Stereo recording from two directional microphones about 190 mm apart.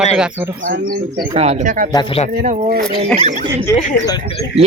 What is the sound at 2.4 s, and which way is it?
Speech, 45° right (ahead or behind).